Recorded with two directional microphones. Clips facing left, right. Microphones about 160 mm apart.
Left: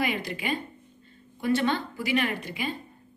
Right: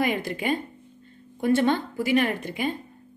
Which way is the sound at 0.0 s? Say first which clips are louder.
Right 4 dB; 50° right (ahead or behind).